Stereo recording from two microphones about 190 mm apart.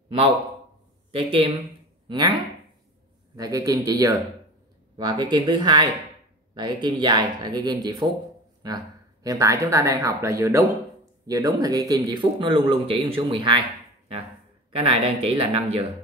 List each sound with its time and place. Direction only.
1.1 s speech: 30° right (ahead or behind)
3.3 s speech: 20° right (ahead or behind)
14.7 s speech: 30° right (ahead or behind)